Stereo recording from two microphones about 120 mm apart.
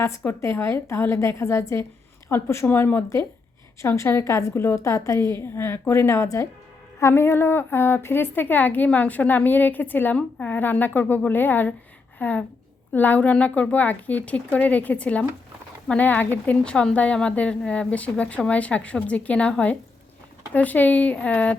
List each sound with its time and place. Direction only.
0.3 s a woman's voice: 20° left (ahead or behind)